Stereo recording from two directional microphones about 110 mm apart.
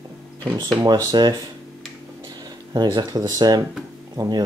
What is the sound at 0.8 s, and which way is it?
Speech, 40° right (ahead or behind).